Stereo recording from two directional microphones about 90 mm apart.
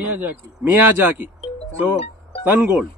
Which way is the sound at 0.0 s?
20° right (ahead or behind).